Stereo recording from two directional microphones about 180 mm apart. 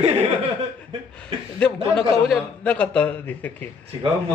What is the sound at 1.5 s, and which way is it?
A man's voice, 5° left (ahead or behind).